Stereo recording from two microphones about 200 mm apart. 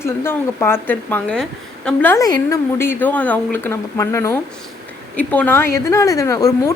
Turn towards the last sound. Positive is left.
turn(degrees=15)  # may be behind; listen again after turning